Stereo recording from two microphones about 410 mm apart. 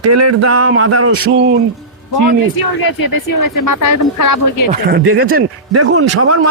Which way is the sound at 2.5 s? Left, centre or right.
Left.